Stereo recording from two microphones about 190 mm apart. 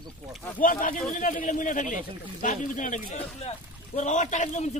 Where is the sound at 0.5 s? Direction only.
45° left (ahead or behind).